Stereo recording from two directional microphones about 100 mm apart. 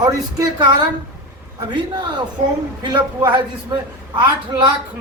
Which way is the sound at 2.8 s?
45° right (ahead or behind).